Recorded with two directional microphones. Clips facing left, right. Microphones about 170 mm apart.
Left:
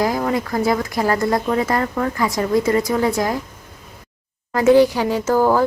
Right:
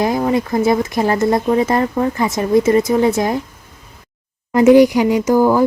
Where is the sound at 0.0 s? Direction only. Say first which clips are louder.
Right 3 dB; 20° right (ahead or behind).